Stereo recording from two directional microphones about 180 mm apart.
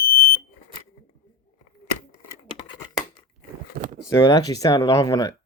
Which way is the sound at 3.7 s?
55° right (ahead or behind).